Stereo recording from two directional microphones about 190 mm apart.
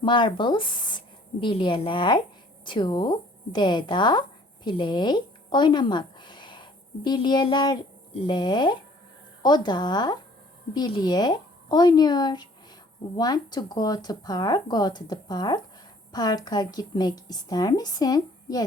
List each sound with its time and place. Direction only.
0.0 s a woman's voice: 25° left (ahead or behind)